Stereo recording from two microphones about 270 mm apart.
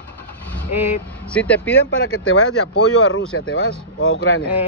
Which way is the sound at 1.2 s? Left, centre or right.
Centre.